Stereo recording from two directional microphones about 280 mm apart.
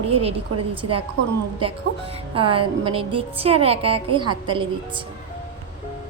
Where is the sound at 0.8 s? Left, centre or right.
Right.